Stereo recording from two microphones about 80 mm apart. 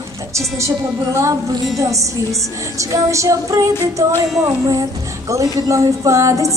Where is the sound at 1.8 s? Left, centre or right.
Right.